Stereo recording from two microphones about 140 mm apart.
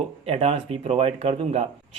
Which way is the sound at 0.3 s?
45° right (ahead or behind).